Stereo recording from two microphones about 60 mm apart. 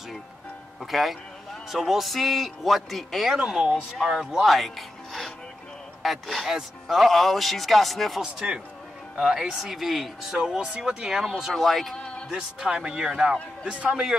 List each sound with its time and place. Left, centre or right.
0.7 s a man's voice: centre
3.3 s a man's voice: centre
8.2 s a man's voice: centre
12.3 s speech: centre